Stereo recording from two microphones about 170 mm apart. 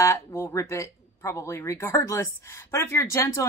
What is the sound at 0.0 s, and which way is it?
Speech, 15° left (ahead or behind).